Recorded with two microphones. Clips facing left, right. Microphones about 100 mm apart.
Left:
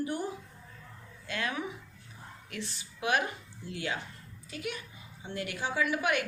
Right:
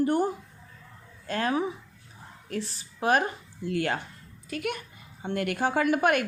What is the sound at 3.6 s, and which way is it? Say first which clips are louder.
Speech: right 8 dB; 55° right (ahead or behind).